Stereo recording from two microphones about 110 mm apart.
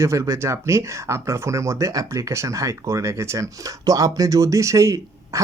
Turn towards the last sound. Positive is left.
turn(degrees=-30)  # may be behind; listen again after turning